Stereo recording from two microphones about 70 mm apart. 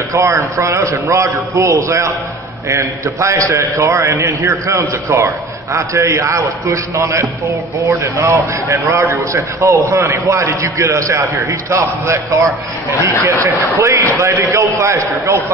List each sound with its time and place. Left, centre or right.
0.1 s a man's voice: right
3.2 s a man's voice: right